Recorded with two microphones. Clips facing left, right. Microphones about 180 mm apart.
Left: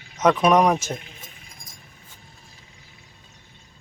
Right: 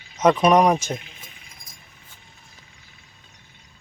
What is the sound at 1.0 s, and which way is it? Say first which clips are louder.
Keys jangling: left 1 dB; 45° left (ahead or behind).